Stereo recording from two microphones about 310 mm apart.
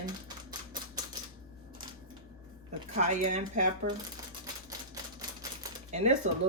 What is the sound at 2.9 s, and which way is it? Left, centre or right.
Speech, right.